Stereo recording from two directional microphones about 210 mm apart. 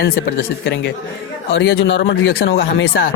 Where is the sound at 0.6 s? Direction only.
55° left (ahead or behind).